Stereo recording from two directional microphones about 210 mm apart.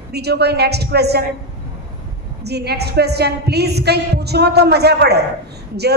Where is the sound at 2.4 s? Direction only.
50° right (ahead or behind).